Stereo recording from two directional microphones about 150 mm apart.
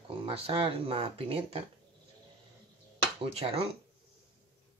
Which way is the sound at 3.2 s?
40° right (ahead or behind).